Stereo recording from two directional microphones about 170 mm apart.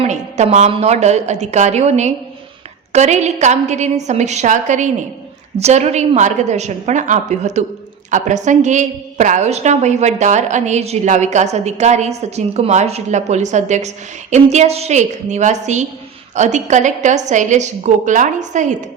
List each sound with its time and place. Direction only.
0.0 s a woman's voice: 40° right (ahead or behind)